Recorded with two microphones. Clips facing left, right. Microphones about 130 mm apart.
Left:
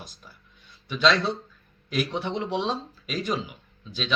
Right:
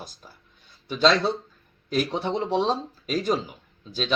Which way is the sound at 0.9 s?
35° right (ahead or behind).